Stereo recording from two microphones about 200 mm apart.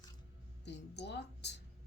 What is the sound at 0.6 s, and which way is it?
Speech, 60° left (ahead or behind).